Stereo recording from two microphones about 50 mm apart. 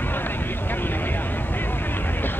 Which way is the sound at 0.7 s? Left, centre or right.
Left.